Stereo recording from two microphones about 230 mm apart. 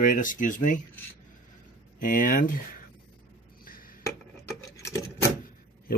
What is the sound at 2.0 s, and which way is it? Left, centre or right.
Speech, left.